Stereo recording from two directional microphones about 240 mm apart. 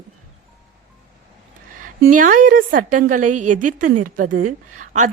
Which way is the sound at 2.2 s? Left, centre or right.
Right.